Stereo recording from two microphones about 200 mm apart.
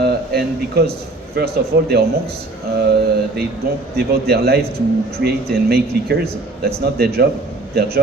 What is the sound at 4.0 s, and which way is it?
Speech, 50° right (ahead or behind).